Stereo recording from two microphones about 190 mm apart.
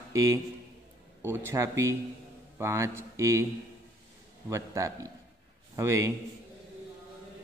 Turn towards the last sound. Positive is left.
turn(degrees=-15)  # may be behind; listen again after turning